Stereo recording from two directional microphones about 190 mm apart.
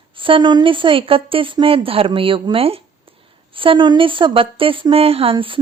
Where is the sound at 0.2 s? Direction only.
25° right (ahead or behind).